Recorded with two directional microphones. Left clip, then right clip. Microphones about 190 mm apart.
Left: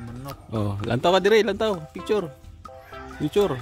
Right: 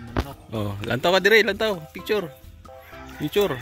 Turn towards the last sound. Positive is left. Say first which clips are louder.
# even
turn(degrees=5)  # may be behind; listen again after turning